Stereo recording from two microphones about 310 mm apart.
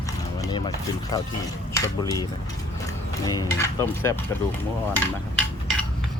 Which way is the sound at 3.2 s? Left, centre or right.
Centre.